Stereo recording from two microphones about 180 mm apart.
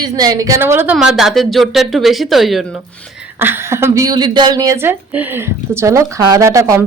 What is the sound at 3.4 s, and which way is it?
A woman's voice, 10° right (ahead or behind).